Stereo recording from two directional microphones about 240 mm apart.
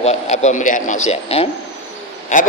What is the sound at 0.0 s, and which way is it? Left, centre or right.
A man's voice, left.